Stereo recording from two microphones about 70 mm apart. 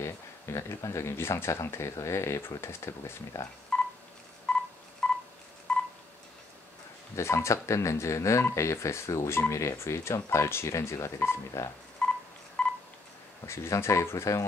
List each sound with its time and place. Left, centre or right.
0.0 s speech: left
3.7 s telephone dialing: centre
4.5 s a sound: centre
5.0 s telephone dialing: centre
7.2 s speech: left
12.0 s telephone dialing: centre
13.5 s speech: left